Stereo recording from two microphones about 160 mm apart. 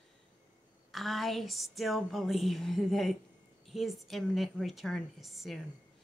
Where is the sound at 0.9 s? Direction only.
Centre (ahead or behind).